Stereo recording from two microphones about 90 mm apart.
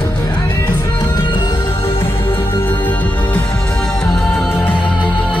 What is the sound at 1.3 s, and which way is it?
Music, 75° left (ahead or behind).